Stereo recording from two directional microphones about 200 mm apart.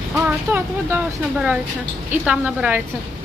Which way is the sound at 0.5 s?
10° right (ahead or behind).